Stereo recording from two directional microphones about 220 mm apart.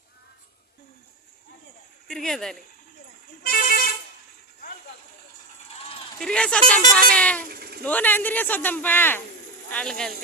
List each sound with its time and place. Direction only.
2.0 s speech: 5° left (ahead or behind)
3.4 s vehicle: 40° left (ahead or behind)
6.1 s speech: 5° left (ahead or behind)
7.4 s a sound: 45° right (ahead or behind)
7.9 s a man's voice: 10° left (ahead or behind)